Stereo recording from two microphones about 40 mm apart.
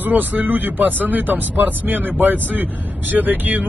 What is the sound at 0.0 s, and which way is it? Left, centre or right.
Speech, right.